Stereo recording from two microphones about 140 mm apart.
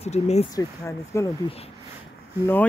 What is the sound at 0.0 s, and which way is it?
Speech, 50° left (ahead or behind).